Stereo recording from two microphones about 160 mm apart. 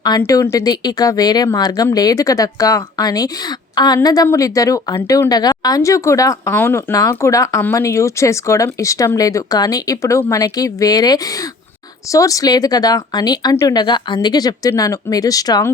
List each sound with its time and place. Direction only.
0.2 s a woman's voice: 15° left (ahead or behind)